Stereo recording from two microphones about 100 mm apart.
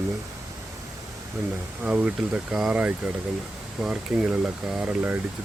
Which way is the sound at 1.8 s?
15° right (ahead or behind).